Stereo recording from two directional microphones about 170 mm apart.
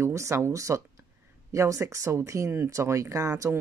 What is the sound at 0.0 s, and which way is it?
Speech, 15° right (ahead or behind).